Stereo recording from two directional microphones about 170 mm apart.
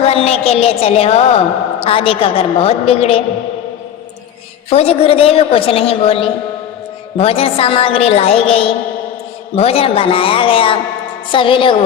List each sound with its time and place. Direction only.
0.0 s a woman's voice: 35° left (ahead or behind)
4.7 s a woman's voice: 35° left (ahead or behind)